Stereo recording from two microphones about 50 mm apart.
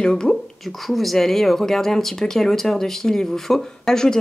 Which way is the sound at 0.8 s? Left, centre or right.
Centre.